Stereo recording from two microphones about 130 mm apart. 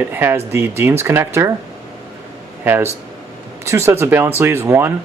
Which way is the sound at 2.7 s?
15° right (ahead or behind).